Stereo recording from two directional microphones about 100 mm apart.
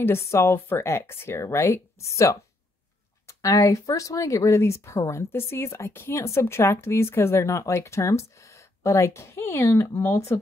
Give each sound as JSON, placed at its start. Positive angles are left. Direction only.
{"t": 0.0, "sound": "a woman's voice", "side_deg": 25}